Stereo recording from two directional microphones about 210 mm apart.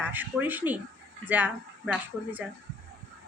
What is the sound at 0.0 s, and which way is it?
Speech, 10° right (ahead or behind).